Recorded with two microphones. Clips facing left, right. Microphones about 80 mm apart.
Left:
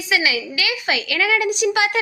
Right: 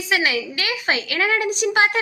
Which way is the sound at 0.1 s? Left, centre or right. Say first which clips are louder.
Even; right.